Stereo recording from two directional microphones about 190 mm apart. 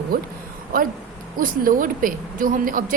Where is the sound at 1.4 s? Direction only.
45° right (ahead or behind).